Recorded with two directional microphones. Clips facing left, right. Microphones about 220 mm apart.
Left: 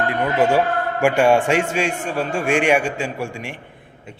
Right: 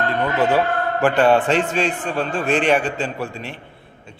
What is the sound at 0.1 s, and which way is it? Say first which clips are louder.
A man's voice: left 1 dB; 15° left (ahead or behind).